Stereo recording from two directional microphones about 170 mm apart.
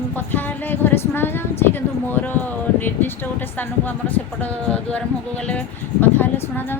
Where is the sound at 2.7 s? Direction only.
10° left (ahead or behind).